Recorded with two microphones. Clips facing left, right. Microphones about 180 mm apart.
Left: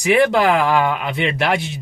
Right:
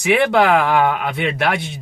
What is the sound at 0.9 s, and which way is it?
Speech, 50° right (ahead or behind).